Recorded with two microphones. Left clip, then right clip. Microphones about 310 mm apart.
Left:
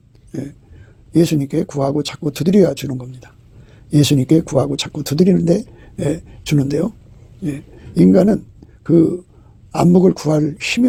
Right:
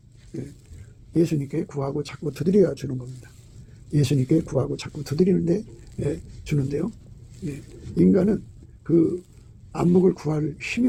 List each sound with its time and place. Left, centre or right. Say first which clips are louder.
1.1 s speech: left 8 dB; left
3.9 s speech: left 9 dB; left
7.9 s speech: left 8 dB; left